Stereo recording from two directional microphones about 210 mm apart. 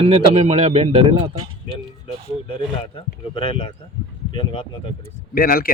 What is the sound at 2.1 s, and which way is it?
Speech, 25° left (ahead or behind).